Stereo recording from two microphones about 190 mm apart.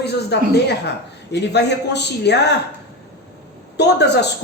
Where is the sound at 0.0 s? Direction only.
60° left (ahead or behind).